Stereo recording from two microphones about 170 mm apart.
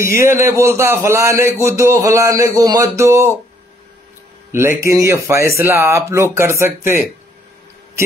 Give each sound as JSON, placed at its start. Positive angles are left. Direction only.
{"t": 0.0, "sound": "a man's voice", "side_deg": -15}
{"t": 4.5, "sound": "a man's voice", "side_deg": -15}